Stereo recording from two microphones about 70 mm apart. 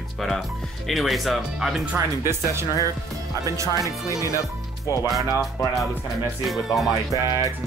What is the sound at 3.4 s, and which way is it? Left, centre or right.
Speech, right.